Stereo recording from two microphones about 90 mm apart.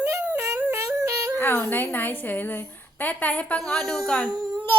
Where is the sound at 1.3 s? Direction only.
25° left (ahead or behind); by 4.2 s 5° left (ahead or behind).